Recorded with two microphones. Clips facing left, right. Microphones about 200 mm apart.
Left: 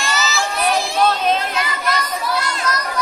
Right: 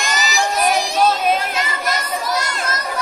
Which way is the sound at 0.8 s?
15° right (ahead or behind).